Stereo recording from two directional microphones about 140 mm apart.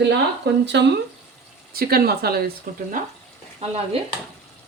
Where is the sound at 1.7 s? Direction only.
90° right.